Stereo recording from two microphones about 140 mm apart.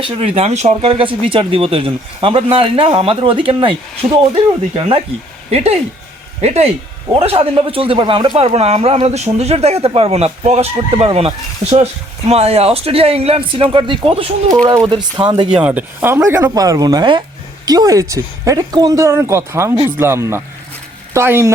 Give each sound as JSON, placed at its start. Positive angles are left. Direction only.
{"t": 0.0, "sound": "speech", "side_deg": -40}
{"t": 8.4, "sound": "speech", "side_deg": -50}
{"t": 14.6, "sound": "speech", "side_deg": -25}
{"t": 15.4, "sound": "speech", "side_deg": -10}